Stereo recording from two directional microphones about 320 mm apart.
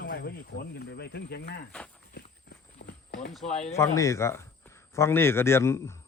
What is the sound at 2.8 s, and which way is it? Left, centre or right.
Walk, left.